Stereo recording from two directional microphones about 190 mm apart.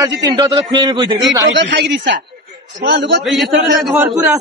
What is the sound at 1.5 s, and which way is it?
A man's voice, 70° right (ahead or behind).